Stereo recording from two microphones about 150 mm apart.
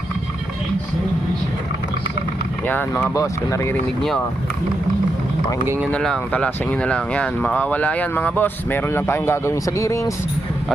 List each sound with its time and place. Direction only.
2.6 s speech: 10° left (ahead or behind)
5.9 s speech: 5° left (ahead or behind)